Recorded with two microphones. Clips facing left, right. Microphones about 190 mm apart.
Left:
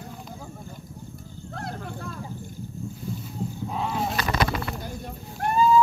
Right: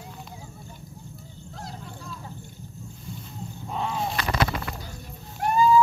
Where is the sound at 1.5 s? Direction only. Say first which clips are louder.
Left 6 dB; 60° left (ahead or behind).